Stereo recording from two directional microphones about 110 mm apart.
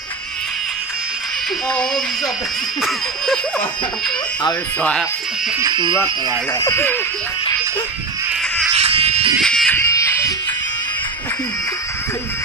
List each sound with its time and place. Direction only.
2.8 s a sound: centre (ahead or behind)
5.6 s speech: 45° right (ahead or behind)
6.6 s speech: 20° left (ahead or behind)
8.7 s a sound: 65° right (ahead or behind)
9.4 s music: 5° left (ahead or behind)
9.8 s music: 25° left (ahead or behind)